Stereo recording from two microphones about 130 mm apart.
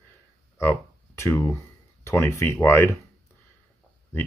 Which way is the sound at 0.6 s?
20° left (ahead or behind).